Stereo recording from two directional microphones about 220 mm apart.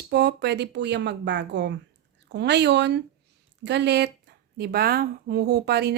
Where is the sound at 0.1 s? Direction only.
50° right (ahead or behind).